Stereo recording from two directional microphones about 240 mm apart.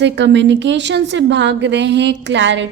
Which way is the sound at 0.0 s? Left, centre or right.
Right.